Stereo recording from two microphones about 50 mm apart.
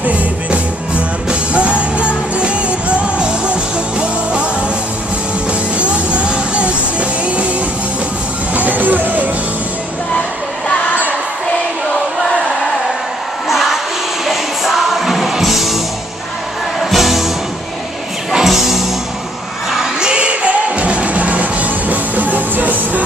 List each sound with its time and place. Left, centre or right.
0.0 s music: right
5.8 s music: right
8.5 s music: right
13.5 s a sound: centre
14.2 s music: centre
16.9 s music: centre
18.3 s music: centre; by 23.0 s right